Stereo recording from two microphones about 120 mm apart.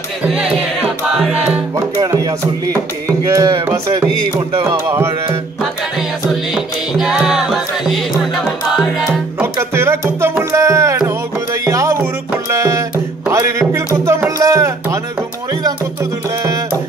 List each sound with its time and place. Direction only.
2.0 s music: 30° right (ahead or behind)
5.6 s music: 5° right (ahead or behind)
9.4 s music: 20° right (ahead or behind)